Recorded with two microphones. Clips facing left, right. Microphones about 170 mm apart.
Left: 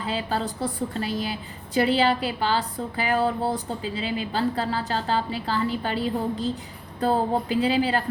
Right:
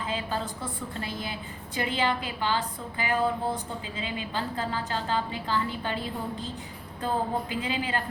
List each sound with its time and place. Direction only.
0.1 s a woman's voice: 35° left (ahead or behind)